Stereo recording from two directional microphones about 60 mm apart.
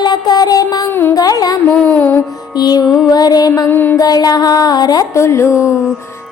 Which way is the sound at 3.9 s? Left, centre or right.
Left.